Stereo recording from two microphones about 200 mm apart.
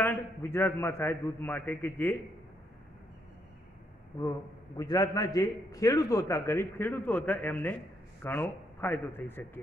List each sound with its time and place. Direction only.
0.0 s a man's voice: 10° left (ahead or behind)
4.2 s a man's voice: 15° left (ahead or behind)